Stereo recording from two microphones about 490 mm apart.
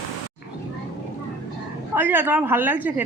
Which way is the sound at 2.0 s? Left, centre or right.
Centre.